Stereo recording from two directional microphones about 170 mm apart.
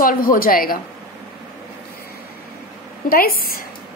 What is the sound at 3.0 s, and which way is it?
Speech, 60° left (ahead or behind).